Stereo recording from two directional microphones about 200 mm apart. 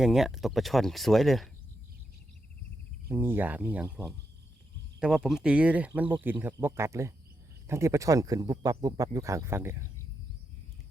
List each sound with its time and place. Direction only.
0.0 s speech: centre (ahead or behind)
3.1 s speech: 10° right (ahead or behind)
4.9 s speech: 5° right (ahead or behind)